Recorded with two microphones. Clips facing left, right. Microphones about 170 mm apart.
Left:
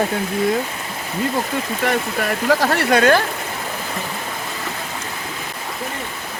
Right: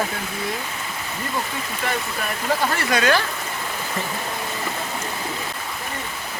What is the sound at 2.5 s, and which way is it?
Speech, 75° left (ahead or behind).